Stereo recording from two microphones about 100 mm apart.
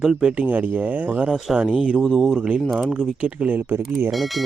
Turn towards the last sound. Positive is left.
turn(degrees=-20)  # may be behind; listen again after turning